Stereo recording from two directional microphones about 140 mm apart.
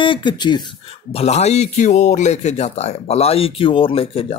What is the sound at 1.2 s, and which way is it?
Speech, 50° left (ahead or behind).